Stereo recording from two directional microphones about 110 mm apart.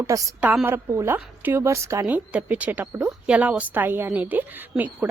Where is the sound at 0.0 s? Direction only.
30° right (ahead or behind).